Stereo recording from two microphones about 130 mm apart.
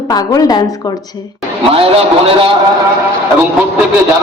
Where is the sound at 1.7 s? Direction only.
45° right (ahead or behind).